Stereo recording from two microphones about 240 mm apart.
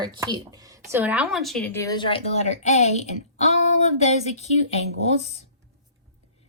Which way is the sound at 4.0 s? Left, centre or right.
Left.